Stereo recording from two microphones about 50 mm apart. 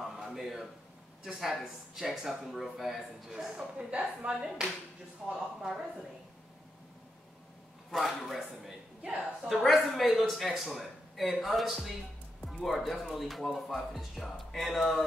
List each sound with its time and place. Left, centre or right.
0.0 s a sound: centre
1.2 s speech: centre
3.5 s speech: centre
5.2 s speech: centre
7.9 s speech: centre